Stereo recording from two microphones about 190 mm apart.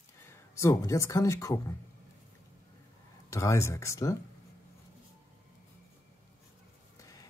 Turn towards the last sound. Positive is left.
turn(degrees=15)  # may be behind; listen again after turning